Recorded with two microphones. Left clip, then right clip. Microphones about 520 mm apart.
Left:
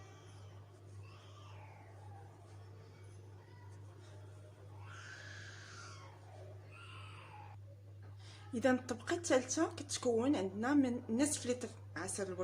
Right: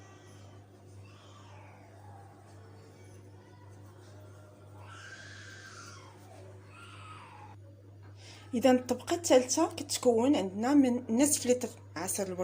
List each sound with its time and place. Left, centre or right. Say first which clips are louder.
8.6 s speech: right 8 dB; left